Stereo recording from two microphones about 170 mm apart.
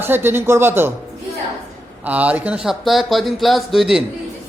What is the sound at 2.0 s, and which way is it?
Speech, 10° right (ahead or behind).